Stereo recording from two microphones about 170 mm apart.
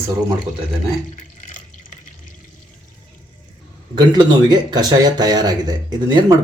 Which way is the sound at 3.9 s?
25° right (ahead or behind).